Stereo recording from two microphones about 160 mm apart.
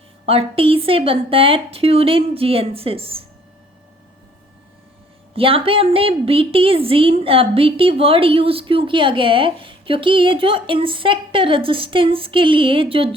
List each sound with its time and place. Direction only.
0.3 s a woman's voice: 35° right (ahead or behind)
5.3 s a woman's voice: 35° right (ahead or behind)